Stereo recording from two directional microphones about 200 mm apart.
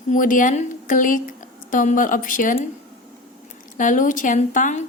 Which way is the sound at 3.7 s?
40° left (ahead or behind).